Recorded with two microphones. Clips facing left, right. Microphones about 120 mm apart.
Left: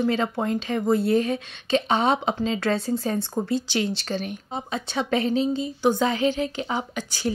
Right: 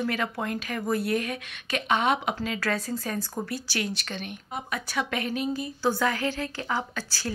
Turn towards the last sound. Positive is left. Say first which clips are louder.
# left 6 dB
turn(degrees=20)  # may be behind; listen again after turning